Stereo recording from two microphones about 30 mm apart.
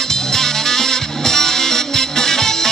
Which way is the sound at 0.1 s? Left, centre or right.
Centre.